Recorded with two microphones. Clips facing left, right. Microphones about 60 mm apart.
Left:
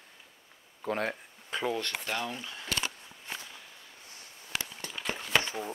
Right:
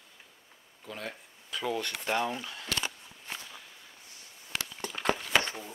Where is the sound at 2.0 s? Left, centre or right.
Centre.